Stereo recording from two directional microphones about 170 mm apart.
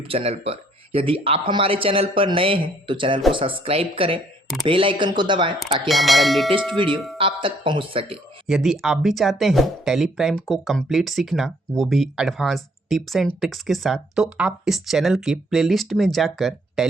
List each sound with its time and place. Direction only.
0.1 s speech: 35° right (ahead or behind)
5.9 s speech: centre (ahead or behind)
6.8 s speech: 30° right (ahead or behind)
8.4 s speech: centre (ahead or behind)